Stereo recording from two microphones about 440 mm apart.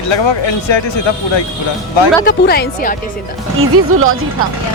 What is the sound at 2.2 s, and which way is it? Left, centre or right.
Speech, left.